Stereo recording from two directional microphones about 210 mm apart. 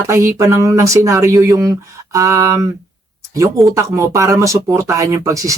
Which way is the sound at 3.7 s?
15° right (ahead or behind).